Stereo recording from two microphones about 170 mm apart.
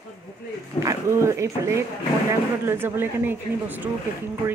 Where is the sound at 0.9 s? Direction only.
15° right (ahead or behind).